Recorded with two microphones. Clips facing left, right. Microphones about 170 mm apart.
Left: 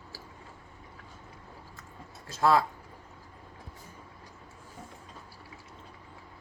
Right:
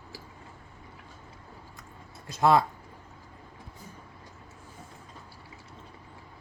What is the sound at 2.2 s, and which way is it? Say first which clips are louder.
Speech: right 2 dB; 20° right (ahead or behind).